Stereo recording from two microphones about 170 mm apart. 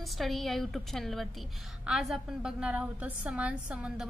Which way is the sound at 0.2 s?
Centre (ahead or behind).